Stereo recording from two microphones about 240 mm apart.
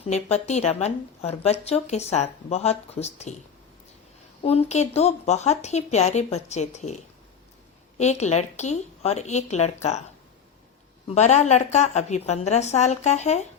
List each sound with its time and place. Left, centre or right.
0.0 s speech: left
4.4 s speech: left
7.9 s speech: left
11.1 s speech: left